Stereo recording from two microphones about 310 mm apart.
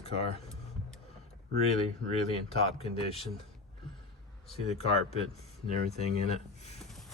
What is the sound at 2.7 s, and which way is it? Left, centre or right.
Speech, centre.